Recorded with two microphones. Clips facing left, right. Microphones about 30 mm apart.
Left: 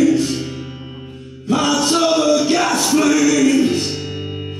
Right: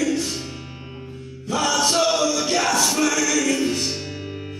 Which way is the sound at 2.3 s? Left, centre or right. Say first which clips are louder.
Left 4 dB; centre.